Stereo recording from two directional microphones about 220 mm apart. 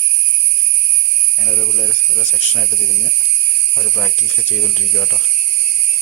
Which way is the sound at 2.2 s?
Centre (ahead or behind).